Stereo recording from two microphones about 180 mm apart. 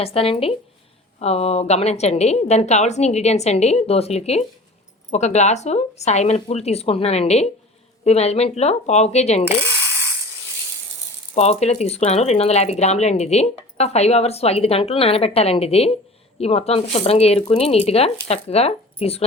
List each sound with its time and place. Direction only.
0.0 s speech: 30° left (ahead or behind)
11.3 s speech: 40° left (ahead or behind)